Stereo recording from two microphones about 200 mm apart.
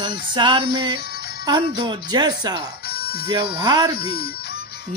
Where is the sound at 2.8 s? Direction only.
55° left (ahead or behind).